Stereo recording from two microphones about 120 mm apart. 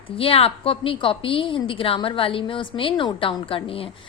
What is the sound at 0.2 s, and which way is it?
A woman's voice, 50° left (ahead or behind).